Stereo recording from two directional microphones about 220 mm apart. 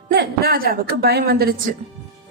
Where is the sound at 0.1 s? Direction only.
45° right (ahead or behind).